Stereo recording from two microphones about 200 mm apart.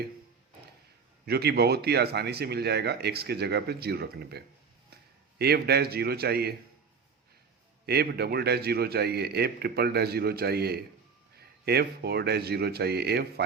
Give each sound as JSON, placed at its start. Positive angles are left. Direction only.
{"t": 1.2, "sound": "speech", "side_deg": -55}
{"t": 7.9, "sound": "speech", "side_deg": -50}